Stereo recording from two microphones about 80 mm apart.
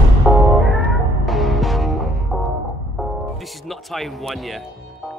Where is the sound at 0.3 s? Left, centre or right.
Centre.